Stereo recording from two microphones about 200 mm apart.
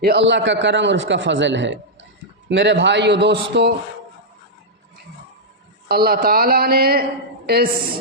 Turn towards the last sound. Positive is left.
turn(degrees=-50)  # may be behind; listen again after turning